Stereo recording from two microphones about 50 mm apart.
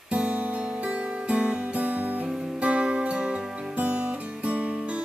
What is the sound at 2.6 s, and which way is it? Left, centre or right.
Music, right.